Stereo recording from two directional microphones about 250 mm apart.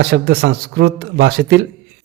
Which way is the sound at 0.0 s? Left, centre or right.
Right.